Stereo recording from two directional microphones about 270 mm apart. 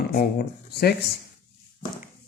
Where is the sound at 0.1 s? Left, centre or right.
Left.